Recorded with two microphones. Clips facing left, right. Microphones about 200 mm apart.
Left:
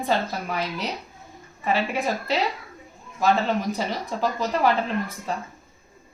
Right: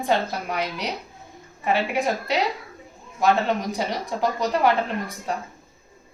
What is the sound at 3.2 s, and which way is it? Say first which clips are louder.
A woman's voice: right 1 dB; 15° right (ahead or behind).